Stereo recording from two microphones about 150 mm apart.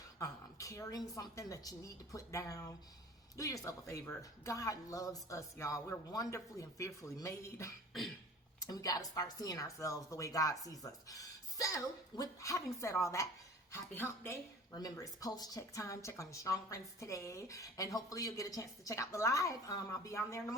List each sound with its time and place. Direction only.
0.2 s speech: 20° left (ahead or behind)